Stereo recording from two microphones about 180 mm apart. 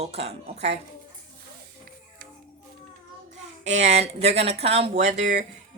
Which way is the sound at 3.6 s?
40° right (ahead or behind).